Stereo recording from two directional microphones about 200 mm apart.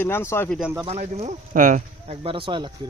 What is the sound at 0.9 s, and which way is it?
Speech, 30° right (ahead or behind).